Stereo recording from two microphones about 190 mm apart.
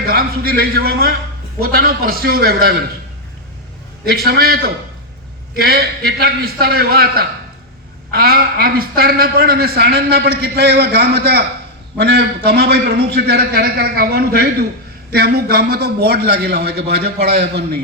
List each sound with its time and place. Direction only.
0.0 s a man's voice: 50° right (ahead or behind)
4.0 s a man's voice: 55° right (ahead or behind)